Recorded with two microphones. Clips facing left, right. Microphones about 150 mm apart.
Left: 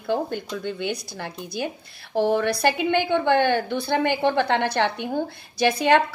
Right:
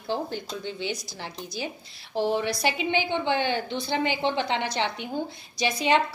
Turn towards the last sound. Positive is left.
turn(degrees=55)  # may be behind; listen again after turning